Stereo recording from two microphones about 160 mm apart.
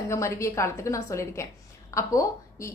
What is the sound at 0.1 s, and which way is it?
A woman's voice, 20° left (ahead or behind).